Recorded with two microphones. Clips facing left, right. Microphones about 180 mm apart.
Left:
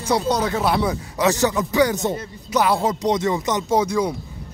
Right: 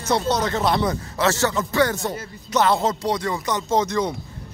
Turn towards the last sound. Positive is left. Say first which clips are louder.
# left 2 dB
turn(degrees=10)  # may be behind; listen again after turning